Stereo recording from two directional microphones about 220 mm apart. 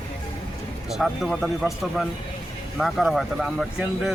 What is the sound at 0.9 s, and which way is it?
Speech, centre (ahead or behind).